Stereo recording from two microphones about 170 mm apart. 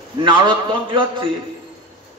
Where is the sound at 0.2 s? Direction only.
30° right (ahead or behind).